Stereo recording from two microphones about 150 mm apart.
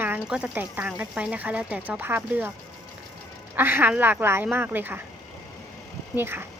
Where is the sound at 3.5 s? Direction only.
15° right (ahead or behind).